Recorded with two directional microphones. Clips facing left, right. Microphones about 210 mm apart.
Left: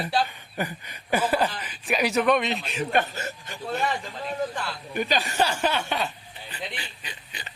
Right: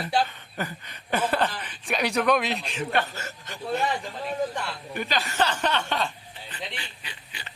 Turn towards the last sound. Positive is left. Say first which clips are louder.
# left 2 dB
turn(degrees=15)  # may be behind; listen again after turning